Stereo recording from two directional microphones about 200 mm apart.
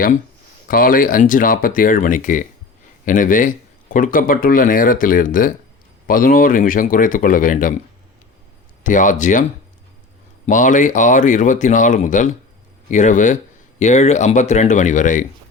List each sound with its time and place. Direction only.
0.7 s speech: 45° left (ahead or behind)
8.8 s speech: 40° left (ahead or behind)
10.4 s speech: 40° left (ahead or behind)